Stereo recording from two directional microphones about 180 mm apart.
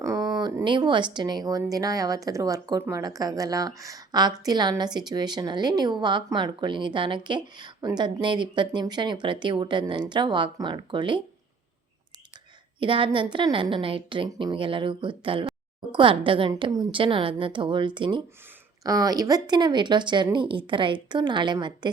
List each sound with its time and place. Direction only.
0.0 s speech: 20° right (ahead or behind)
12.8 s speech: 30° right (ahead or behind)